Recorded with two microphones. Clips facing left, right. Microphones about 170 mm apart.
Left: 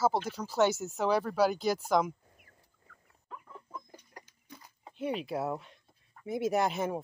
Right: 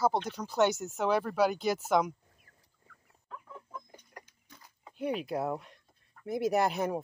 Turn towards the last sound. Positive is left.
turn(degrees=0)  # may be behind; listen again after turning